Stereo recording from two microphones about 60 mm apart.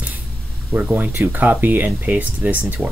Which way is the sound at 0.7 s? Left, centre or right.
Right.